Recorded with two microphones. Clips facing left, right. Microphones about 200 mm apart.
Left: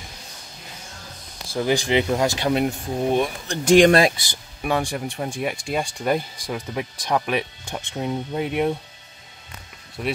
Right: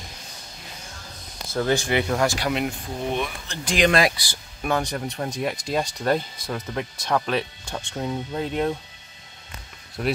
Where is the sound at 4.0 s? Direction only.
25° left (ahead or behind).